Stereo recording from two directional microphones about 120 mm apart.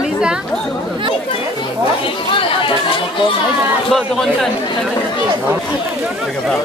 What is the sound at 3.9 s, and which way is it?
Speech, 5° left (ahead or behind).